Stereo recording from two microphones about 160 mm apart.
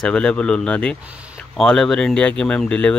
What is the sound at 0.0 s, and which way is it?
Speech, 5° left (ahead or behind).